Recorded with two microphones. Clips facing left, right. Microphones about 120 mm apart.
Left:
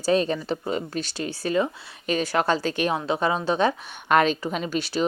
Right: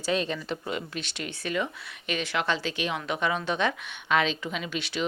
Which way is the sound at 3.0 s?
30° left (ahead or behind).